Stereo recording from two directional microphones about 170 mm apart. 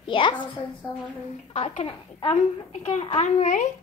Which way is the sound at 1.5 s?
35° left (ahead or behind).